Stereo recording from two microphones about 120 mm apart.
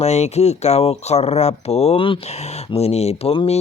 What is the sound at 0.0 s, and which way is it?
Speech, 65° left (ahead or behind).